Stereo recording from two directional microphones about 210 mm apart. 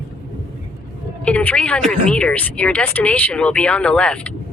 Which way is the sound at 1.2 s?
5° left (ahead or behind).